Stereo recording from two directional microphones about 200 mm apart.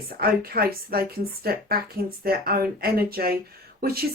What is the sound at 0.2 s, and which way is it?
Speech, 50° right (ahead or behind).